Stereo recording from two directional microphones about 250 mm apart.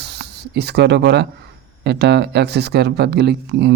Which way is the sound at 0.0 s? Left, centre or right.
Right.